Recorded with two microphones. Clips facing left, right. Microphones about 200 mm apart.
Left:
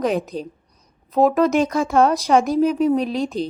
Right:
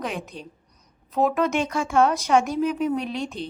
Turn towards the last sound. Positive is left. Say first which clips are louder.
# left 7 dB
turn(degrees=40)  # may be behind; listen again after turning